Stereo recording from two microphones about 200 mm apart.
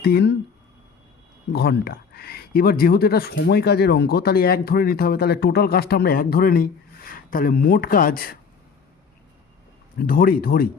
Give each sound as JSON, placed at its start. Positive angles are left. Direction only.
{"t": 0.0, "sound": "speech", "side_deg": 55}
{"t": 1.5, "sound": "speech", "side_deg": 55}
{"t": 10.0, "sound": "speech", "side_deg": 45}